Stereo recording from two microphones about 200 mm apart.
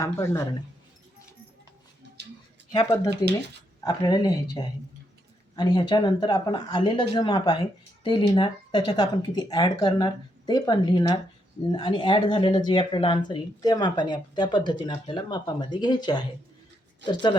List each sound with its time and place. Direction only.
0.0 s speech: 15° left (ahead or behind)
2.2 s a sound: 55° right (ahead or behind)
2.7 s speech: 20° left (ahead or behind)
17.0 s speech: 60° right (ahead or behind)